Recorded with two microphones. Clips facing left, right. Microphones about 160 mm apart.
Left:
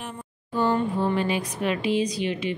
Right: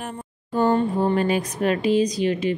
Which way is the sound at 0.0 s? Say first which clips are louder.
Right 4 dB; 45° right (ahead or behind).